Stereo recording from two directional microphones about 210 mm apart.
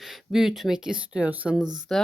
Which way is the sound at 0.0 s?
Centre (ahead or behind).